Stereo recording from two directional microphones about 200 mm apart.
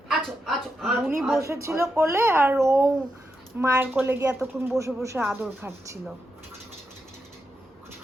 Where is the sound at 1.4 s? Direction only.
15° right (ahead or behind).